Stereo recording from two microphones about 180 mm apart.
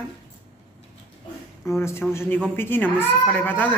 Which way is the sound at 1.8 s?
15° left (ahead or behind).